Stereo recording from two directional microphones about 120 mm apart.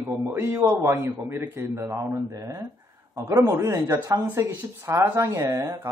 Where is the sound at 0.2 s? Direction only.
20° right (ahead or behind).